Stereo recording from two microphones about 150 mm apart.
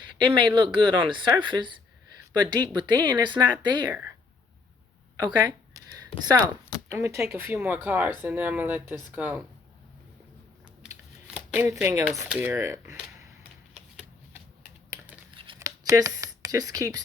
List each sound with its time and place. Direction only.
0.3 s a woman's voice: 30° right (ahead or behind)
5.1 s speech: 25° right (ahead or behind)
11.3 s shuffling cards: 10° right (ahead or behind)
11.7 s speech: 15° right (ahead or behind)
15.5 s a sound: 20° right (ahead or behind)